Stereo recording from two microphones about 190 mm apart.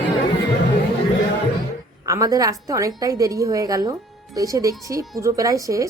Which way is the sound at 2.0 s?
15° right (ahead or behind).